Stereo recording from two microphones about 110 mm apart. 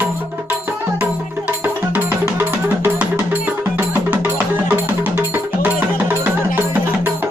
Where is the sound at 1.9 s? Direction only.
20° right (ahead or behind).